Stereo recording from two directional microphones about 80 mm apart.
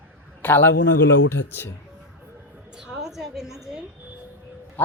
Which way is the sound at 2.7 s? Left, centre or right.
Centre.